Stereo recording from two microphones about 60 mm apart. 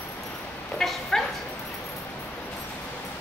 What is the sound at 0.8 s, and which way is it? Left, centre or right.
Bow-wow, centre.